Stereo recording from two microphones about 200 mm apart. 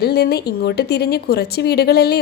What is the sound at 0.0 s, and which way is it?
A woman's voice, 50° left (ahead or behind).